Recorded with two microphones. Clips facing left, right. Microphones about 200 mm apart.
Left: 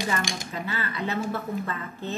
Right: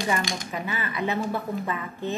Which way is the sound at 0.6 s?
15° right (ahead or behind).